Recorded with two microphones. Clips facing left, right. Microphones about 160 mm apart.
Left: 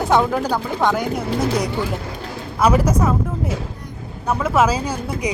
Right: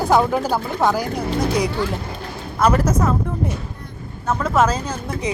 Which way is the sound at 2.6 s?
10° left (ahead or behind).